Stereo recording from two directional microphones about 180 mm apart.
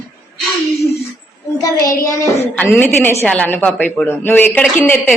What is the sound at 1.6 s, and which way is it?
A child's voice, 20° left (ahead or behind).